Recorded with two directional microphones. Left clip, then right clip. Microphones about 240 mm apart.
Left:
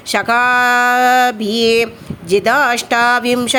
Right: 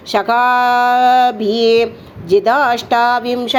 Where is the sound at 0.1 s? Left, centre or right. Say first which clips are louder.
Even; left.